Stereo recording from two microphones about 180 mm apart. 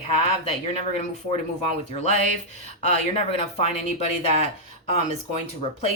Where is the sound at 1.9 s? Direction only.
35° left (ahead or behind).